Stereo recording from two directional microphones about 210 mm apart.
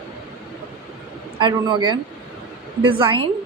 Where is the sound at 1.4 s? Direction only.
20° right (ahead or behind).